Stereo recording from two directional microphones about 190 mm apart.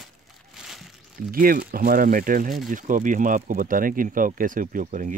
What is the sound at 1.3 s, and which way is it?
Speech, 50° right (ahead or behind).